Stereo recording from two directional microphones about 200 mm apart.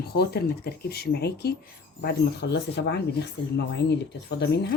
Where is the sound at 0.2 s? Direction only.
55° left (ahead or behind).